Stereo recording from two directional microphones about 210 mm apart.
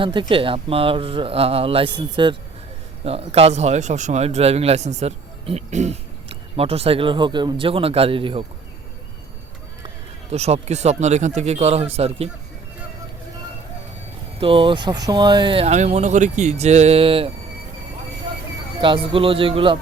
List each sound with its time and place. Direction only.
0.0 s speech: 25° right (ahead or behind)
10.3 s speech: 30° right (ahead or behind)
14.3 s speech: 25° right (ahead or behind)
18.8 s speech: 25° right (ahead or behind)